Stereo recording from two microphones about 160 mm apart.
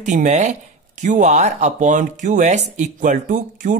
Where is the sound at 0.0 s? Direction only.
50° right (ahead or behind).